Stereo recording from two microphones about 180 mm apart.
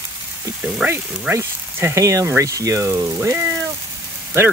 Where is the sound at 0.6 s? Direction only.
10° right (ahead or behind).